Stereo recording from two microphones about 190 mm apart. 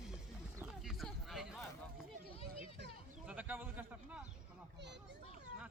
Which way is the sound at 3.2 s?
10° right (ahead or behind).